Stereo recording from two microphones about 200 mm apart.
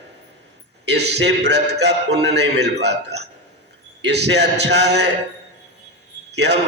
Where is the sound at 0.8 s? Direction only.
55° right (ahead or behind).